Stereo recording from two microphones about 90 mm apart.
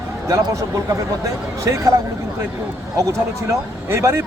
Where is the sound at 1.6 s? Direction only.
35° right (ahead or behind).